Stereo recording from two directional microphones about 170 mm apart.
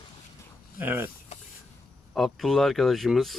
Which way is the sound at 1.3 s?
40° left (ahead or behind).